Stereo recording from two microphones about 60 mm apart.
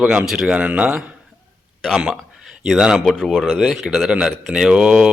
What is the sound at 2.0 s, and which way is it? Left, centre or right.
Speech, centre.